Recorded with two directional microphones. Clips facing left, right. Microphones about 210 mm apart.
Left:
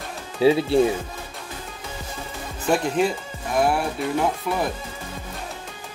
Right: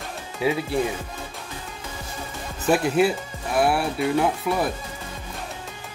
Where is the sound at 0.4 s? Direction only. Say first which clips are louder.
Left 6 dB; 30° left (ahead or behind).